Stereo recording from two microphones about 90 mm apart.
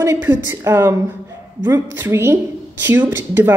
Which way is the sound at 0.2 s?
25° right (ahead or behind).